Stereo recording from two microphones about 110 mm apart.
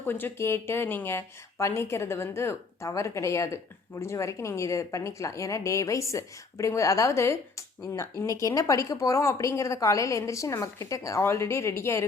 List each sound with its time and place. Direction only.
0.0 s a woman's voice: 20° left (ahead or behind)